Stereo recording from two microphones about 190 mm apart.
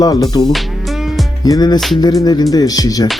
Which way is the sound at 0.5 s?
Centre (ahead or behind).